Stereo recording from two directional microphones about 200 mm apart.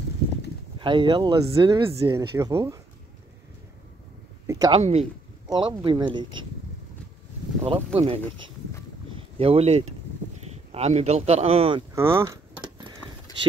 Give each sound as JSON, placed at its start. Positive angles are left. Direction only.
{"t": 0.7, "sound": "speech", "side_deg": -25}
{"t": 2.1, "sound": "speech", "side_deg": -15}
{"t": 4.5, "sound": "speech", "side_deg": -20}
{"t": 7.6, "sound": "speech", "side_deg": -30}
{"t": 9.1, "sound": "boat", "side_deg": -30}
{"t": 10.7, "sound": "speech", "side_deg": -35}
{"t": 11.9, "sound": "speech", "side_deg": -10}